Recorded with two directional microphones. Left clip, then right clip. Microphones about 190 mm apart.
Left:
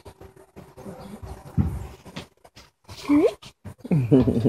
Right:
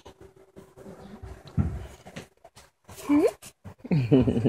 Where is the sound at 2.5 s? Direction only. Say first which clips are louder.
Left 4 dB; 45° right (ahead or behind).